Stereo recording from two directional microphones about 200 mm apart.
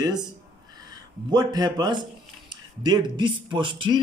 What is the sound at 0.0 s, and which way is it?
Speech, 20° right (ahead or behind).